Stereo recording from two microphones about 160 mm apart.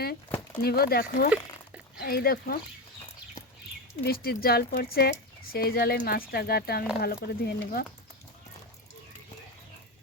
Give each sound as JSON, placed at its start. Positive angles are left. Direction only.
{"t": 0.3, "sound": "a sound", "side_deg": 15}
{"t": 0.6, "sound": "speech", "side_deg": 75}
{"t": 4.0, "sound": "speech", "side_deg": 70}